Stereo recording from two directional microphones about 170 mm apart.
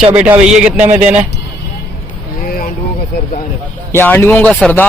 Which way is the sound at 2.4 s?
60° left (ahead or behind).